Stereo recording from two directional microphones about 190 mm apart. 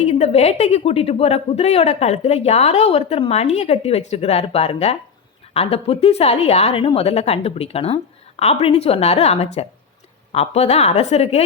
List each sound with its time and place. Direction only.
0.0 s a woman's voice: 35° left (ahead or behind)